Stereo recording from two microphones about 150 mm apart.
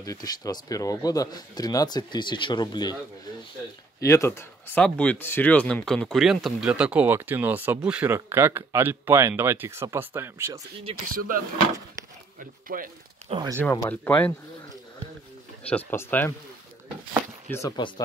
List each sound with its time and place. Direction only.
0.0 s speech: 25° left (ahead or behind)
4.0 s speech: 20° left (ahead or behind); by 10.6 s 15° right (ahead or behind)
11.1 s speech: 70° right (ahead or behind)
13.6 s speech: 15° left (ahead or behind)
15.7 s speech: 15° left (ahead or behind)
17.5 s speech: 20° left (ahead or behind)
17.7 s speech: 30° left (ahead or behind)